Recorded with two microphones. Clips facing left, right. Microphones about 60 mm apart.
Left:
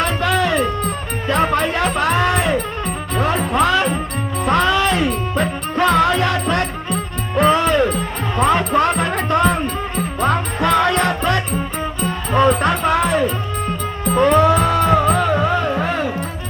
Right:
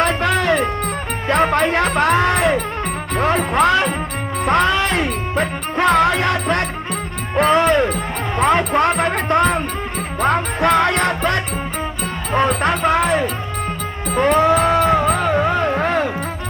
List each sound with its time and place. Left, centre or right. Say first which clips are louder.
0.0 s music: right 1 dB; right
3.2 s speech: right 1 dB; right
4.4 s music: even; right
12.6 s speech: even; right
14.2 s music: left 1 dB; right
15.0 s music: even; centre
15.6 s music: right 2 dB; right